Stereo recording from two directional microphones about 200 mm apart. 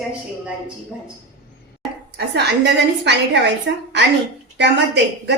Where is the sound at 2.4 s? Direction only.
60° right (ahead or behind).